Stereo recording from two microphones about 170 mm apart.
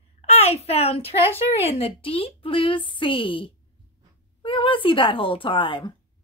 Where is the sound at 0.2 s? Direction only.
40° left (ahead or behind).